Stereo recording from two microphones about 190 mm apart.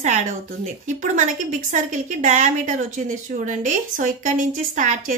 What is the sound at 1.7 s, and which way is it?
A woman's voice, 40° right (ahead or behind).